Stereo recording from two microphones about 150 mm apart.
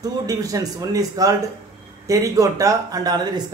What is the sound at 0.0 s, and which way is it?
Speech, 25° right (ahead or behind).